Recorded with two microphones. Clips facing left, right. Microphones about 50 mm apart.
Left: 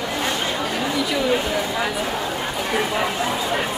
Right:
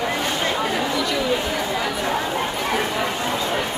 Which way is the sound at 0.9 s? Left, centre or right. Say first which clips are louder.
Left 1 dB; centre.